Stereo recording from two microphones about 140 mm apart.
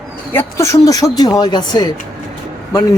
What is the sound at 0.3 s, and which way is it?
Speech, 20° left (ahead or behind).